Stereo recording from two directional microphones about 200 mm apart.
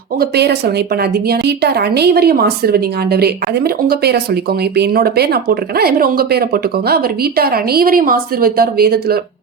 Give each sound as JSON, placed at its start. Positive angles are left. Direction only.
{"t": 0.2, "sound": "speech", "side_deg": -55}